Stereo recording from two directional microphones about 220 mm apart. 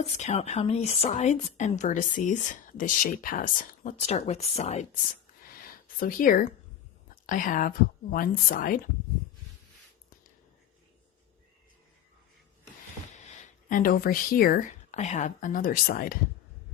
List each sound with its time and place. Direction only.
0.0 s a woman's voice: 30° left (ahead or behind)
13.3 s speech: 35° left (ahead or behind)